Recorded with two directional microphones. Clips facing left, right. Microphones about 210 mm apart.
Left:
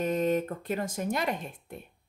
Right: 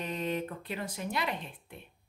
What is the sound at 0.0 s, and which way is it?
Speech, 45° left (ahead or behind).